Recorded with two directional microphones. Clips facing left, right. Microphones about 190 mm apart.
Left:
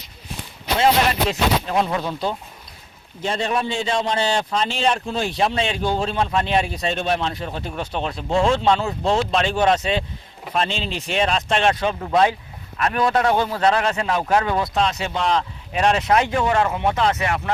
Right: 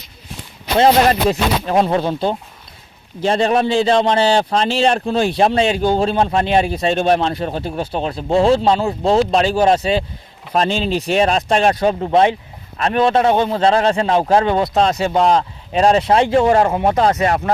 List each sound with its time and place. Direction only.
1.3 s a man's voice: 45° right (ahead or behind)
3.7 s a man's voice: 35° right (ahead or behind)
14.7 s a man's voice: 40° right (ahead or behind)